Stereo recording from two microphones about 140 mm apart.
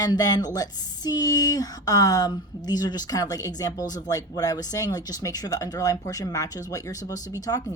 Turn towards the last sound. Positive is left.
turn(degrees=25)  # may be behind; listen again after turning